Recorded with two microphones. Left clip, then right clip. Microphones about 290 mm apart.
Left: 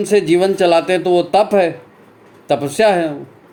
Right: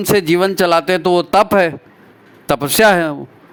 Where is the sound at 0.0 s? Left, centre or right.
Right.